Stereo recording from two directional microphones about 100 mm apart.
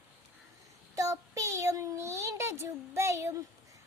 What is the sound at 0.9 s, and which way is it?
Speech, 35° right (ahead or behind).